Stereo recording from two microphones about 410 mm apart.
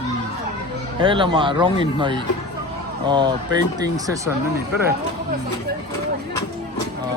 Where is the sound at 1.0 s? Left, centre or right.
Centre.